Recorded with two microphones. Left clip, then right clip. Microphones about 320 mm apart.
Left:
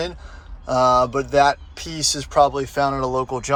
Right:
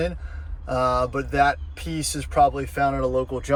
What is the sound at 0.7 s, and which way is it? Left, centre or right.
Speech, centre.